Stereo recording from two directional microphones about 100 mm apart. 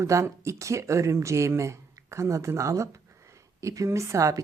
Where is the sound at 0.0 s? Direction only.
30° right (ahead or behind).